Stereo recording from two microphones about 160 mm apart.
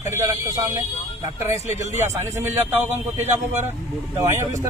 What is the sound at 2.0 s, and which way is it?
A man's voice, 15° right (ahead or behind).